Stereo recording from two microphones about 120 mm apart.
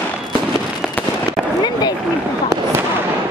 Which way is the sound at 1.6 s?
35° left (ahead or behind).